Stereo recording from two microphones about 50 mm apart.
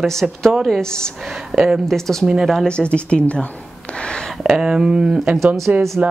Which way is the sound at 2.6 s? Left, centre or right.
Left.